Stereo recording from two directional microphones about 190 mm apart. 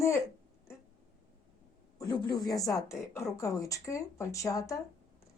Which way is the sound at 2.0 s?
20° left (ahead or behind).